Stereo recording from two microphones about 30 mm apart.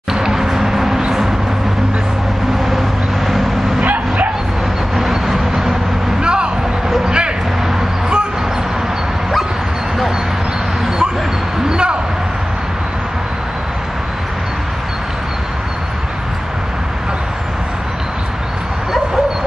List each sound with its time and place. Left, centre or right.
0.1 s music: centre
3.8 s bow-wow: right
4.9 s vehicle: centre
6.2 s vehicle: right
7.1 s a sound: right
11.7 s basketball bounce: right